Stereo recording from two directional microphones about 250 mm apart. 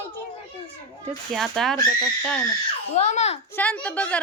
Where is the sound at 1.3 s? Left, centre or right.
Centre.